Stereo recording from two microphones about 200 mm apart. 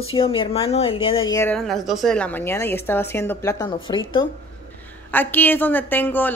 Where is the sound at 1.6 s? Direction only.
Centre (ahead or behind); by 4.0 s 25° left (ahead or behind).